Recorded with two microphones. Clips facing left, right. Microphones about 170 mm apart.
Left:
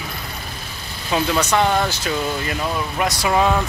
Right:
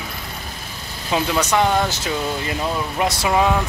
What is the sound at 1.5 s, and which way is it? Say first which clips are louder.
Speech: right 1 dB; 15° right (ahead or behind).